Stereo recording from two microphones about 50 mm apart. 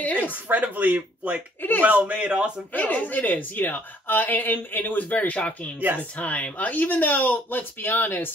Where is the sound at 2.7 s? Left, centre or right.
Left.